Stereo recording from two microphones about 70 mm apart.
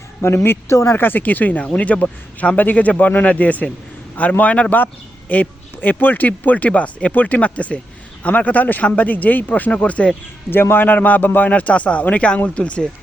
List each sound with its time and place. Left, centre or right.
0.4 s speech: left
10.5 s speech: left; by 12.9 s centre